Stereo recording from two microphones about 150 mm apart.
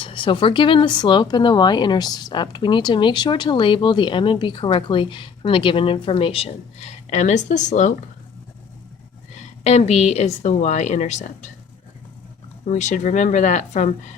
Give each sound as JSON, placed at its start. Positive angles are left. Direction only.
{"t": 0.0, "sound": "speech", "side_deg": 35}
{"t": 9.6, "sound": "a woman's voice", "side_deg": 45}
{"t": 12.6, "sound": "a woman's voice", "side_deg": 50}